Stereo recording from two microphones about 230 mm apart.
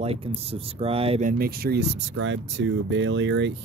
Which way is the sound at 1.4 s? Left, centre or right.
Right.